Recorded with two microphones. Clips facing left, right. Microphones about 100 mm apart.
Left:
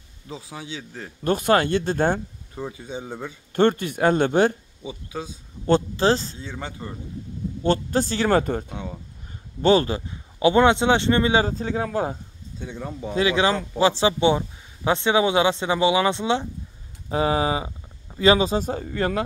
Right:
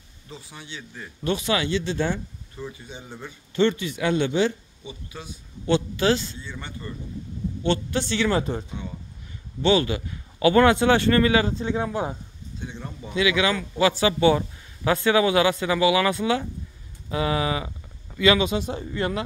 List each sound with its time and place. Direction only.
1.2 s a man's voice: 45° left (ahead or behind)
5.7 s speech: 35° left (ahead or behind)
6.3 s speech: 90° left
7.6 s speech: 40° left (ahead or behind)
9.6 s speech: 40° left (ahead or behind); by 11.4 s 25° left (ahead or behind)
11.4 s speech: 40° left (ahead or behind)